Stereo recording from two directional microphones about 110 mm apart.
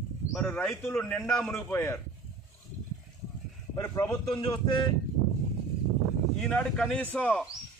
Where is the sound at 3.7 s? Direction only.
30° left (ahead or behind).